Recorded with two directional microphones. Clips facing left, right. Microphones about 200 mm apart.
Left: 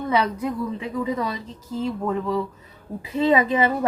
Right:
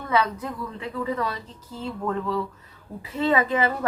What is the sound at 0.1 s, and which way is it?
A woman's voice, 15° left (ahead or behind).